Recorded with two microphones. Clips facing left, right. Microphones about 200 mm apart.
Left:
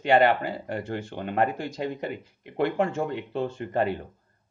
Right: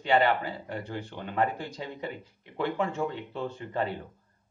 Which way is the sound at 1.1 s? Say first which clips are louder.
Left 3 dB; 60° left (ahead or behind).